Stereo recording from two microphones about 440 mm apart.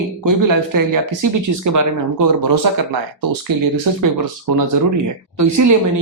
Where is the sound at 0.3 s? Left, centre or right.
Right.